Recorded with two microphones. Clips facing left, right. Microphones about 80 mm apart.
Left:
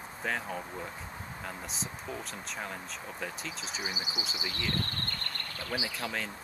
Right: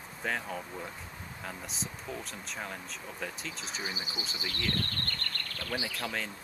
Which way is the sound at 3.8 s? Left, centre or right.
Centre.